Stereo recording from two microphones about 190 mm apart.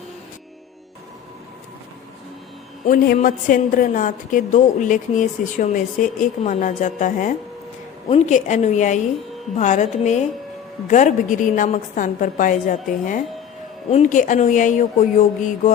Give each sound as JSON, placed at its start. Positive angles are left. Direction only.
{"t": 2.8, "sound": "a woman's voice", "side_deg": 45}